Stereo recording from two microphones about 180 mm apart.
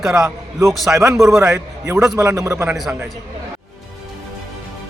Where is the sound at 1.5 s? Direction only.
15° right (ahead or behind).